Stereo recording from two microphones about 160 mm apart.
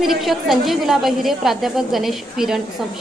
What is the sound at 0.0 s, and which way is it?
A woman's voice, centre (ahead or behind).